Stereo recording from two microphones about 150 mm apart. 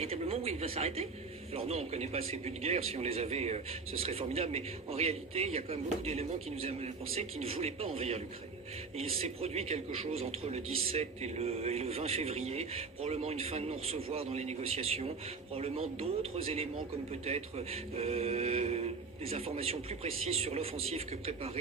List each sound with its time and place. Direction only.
0.0 s speech: 40° right (ahead or behind)